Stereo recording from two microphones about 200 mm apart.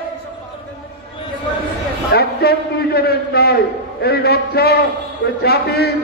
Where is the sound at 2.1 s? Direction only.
55° left (ahead or behind).